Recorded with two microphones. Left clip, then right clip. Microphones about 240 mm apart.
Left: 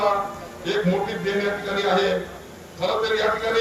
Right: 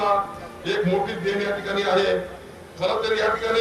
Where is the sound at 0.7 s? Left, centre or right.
Right.